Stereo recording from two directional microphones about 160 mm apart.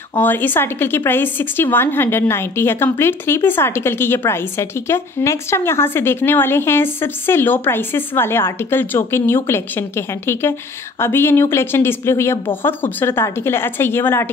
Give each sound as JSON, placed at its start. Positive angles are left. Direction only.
{"t": 0.2, "sound": "a woman's voice", "side_deg": 10}